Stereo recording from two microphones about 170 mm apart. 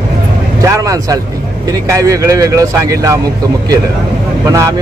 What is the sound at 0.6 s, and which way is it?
Speech, 20° right (ahead or behind).